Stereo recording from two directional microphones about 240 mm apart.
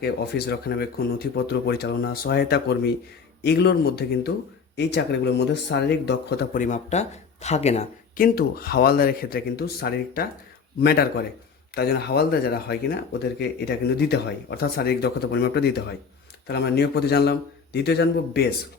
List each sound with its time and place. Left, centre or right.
0.0 s a man's voice: left